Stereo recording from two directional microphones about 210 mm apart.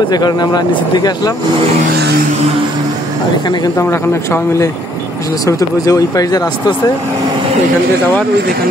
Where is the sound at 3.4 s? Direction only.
20° left (ahead or behind).